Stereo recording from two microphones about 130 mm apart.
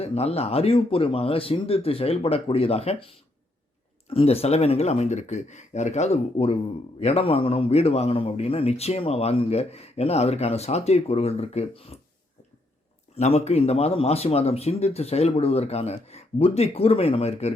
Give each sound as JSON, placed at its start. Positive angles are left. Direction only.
{"t": 0.0, "sound": "a man's voice", "side_deg": 50}
{"t": 13.1, "sound": "a man's voice", "side_deg": 55}